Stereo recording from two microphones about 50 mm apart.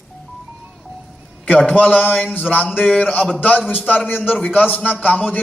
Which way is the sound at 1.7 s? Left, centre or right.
Left.